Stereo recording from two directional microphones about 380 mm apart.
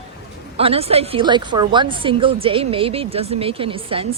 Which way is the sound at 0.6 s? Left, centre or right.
Centre.